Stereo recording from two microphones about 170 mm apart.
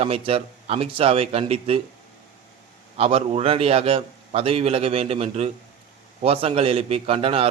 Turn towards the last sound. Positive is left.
turn(degrees=-35)  # may be behind; listen again after turning